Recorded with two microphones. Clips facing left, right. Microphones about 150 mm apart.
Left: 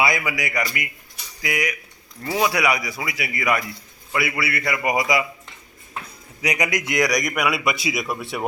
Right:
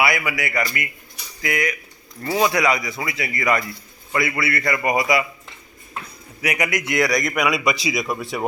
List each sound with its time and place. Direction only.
0.0 s a man's voice: 20° left (ahead or behind)
6.4 s a man's voice: 20° left (ahead or behind); by 8.4 s centre (ahead or behind)